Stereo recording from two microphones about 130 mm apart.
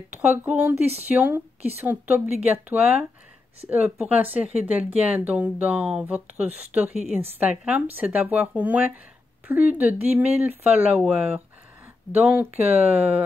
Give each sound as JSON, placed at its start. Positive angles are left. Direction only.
{"t": 0.2, "sound": "speech", "side_deg": -10}